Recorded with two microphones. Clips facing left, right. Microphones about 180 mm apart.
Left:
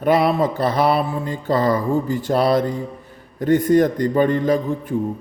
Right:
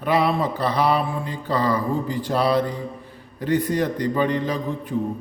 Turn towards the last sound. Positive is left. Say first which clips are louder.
# left 7 dB
turn(degrees=50)  # may be behind; listen again after turning